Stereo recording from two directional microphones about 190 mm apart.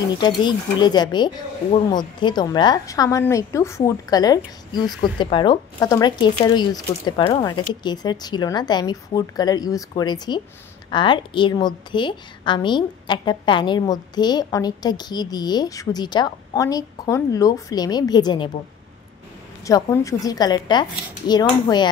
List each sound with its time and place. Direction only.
0.2 s a woman's voice: 25° left (ahead or behind)
19.6 s a woman's voice: 15° left (ahead or behind)